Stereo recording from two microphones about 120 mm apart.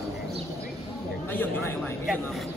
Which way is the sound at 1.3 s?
15° left (ahead or behind).